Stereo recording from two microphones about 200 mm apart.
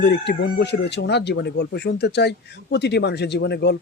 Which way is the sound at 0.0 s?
60° left (ahead or behind).